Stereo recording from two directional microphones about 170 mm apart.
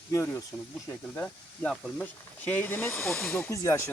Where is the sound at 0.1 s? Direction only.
20° left (ahead or behind).